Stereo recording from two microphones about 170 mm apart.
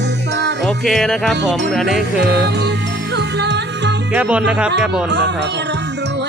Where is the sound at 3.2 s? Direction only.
90° right.